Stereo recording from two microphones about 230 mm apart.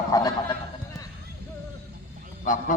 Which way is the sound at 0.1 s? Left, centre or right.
Centre.